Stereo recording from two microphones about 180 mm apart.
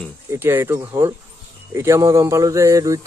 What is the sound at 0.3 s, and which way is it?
Speech, 15° right (ahead or behind).